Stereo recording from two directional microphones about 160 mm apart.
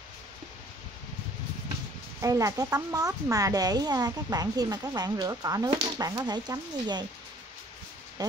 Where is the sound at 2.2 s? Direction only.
20° right (ahead or behind).